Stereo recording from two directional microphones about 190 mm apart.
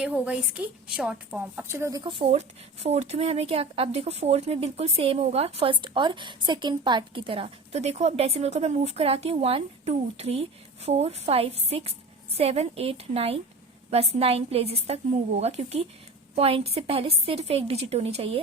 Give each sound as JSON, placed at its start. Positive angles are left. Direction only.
{"t": 0.0, "sound": "a woman's voice", "side_deg": -5}